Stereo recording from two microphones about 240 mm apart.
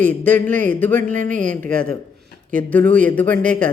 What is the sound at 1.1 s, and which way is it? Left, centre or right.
Speech, right.